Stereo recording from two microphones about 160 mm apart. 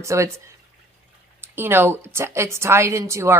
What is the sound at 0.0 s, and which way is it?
A woman's voice, 20° right (ahead or behind).